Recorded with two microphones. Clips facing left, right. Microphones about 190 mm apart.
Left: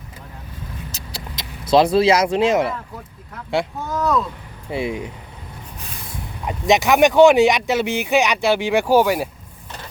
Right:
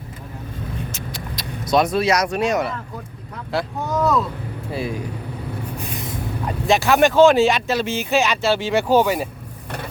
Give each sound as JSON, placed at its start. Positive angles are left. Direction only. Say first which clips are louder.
{"t": 1.4, "sound": "speech", "louder": "left 3 dB", "side_deg": 30}
{"t": 3.8, "sound": "speech", "louder": "right 4 dB", "side_deg": 0}
{"t": 4.7, "sound": "speech", "louder": "left 2 dB", "side_deg": 20}
{"t": 6.4, "sound": "speech", "louder": "left 2 dB", "side_deg": 20}